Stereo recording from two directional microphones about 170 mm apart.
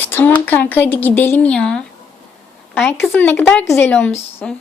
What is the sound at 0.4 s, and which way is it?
Speech, 10° left (ahead or behind).